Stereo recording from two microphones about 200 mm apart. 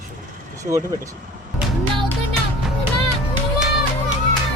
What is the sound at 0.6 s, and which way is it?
Speech, 15° right (ahead or behind).